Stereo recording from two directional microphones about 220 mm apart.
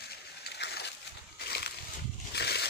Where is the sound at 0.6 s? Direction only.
50° left (ahead or behind).